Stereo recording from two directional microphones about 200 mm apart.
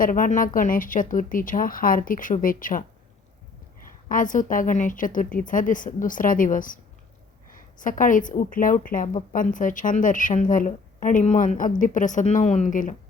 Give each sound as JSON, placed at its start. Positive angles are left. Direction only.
{"t": 0.0, "sound": "speech", "side_deg": 45}
{"t": 4.1, "sound": "a woman's voice", "side_deg": 40}